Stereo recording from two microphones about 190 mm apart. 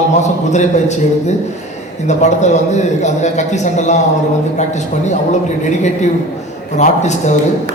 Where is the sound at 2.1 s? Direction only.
40° left (ahead or behind).